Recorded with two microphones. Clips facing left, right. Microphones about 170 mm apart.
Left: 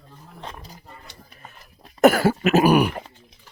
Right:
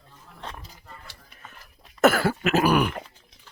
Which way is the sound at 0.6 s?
40° left (ahead or behind).